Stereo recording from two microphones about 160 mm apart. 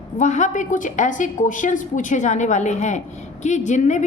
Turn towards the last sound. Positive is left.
turn(degrees=50)  # may be behind; listen again after turning